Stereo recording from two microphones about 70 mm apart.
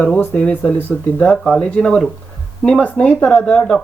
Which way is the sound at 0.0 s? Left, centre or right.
Left.